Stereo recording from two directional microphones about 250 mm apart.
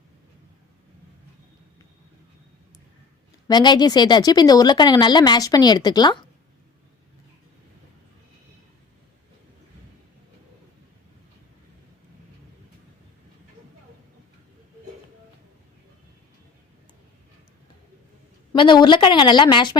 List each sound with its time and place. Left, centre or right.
3.4 s speech: centre
18.5 s speech: centre